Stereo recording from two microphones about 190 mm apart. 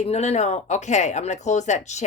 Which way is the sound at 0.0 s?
35° left (ahead or behind).